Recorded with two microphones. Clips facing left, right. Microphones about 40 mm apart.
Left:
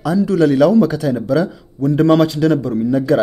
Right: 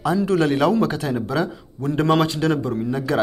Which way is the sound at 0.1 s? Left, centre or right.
Right.